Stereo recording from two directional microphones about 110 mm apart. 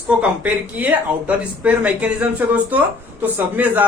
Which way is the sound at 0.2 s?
15° right (ahead or behind).